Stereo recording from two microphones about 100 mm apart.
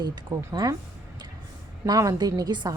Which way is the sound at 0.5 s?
40° right (ahead or behind).